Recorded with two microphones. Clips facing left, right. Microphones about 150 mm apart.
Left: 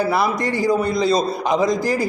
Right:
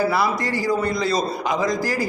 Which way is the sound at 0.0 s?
20° left (ahead or behind).